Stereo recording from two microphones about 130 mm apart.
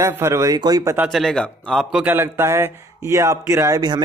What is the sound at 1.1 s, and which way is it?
Speech, 5° left (ahead or behind).